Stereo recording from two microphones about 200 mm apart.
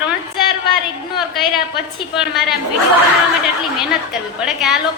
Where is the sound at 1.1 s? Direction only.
Centre (ahead or behind).